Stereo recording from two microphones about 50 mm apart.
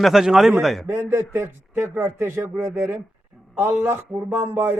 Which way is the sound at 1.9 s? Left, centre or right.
Right.